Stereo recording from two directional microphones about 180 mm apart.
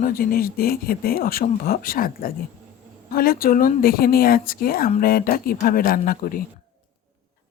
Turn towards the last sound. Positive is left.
turn(degrees=50)  # may be behind; listen again after turning